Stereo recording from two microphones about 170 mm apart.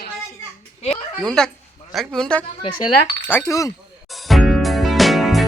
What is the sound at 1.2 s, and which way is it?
A man's voice, 5° left (ahead or behind).